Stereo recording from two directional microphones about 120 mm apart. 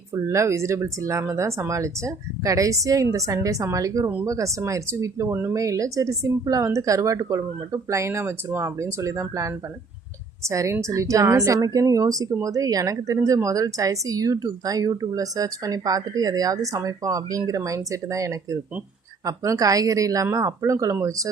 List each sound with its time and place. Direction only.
0.1 s a woman's voice: 25° right (ahead or behind)